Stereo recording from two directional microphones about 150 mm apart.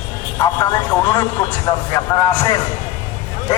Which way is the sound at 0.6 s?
25° left (ahead or behind).